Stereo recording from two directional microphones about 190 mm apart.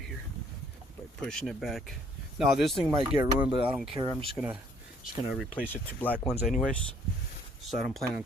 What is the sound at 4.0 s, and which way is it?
Speech, 25° right (ahead or behind).